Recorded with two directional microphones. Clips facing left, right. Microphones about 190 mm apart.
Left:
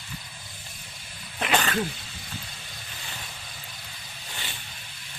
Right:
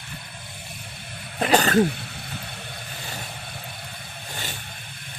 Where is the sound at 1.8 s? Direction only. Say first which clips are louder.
Right 10 dB; 60° right (ahead or behind).